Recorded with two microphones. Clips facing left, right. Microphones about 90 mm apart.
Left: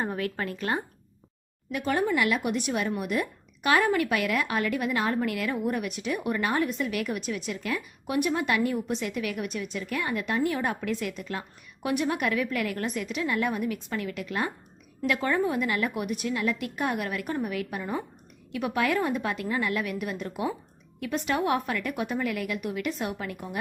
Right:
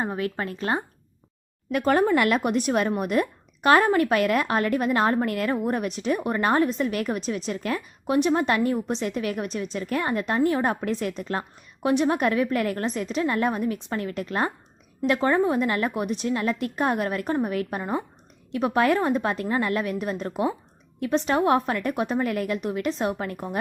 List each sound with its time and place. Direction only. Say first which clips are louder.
0.0 s speech: right 2 dB; 25° right (ahead or behind)
1.7 s speech: right 6 dB; 50° right (ahead or behind)